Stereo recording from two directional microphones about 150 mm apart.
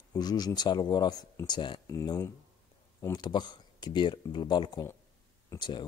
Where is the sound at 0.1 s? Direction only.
25° left (ahead or behind).